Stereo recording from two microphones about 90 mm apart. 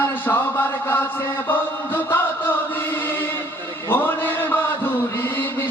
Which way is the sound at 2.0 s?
25° left (ahead or behind).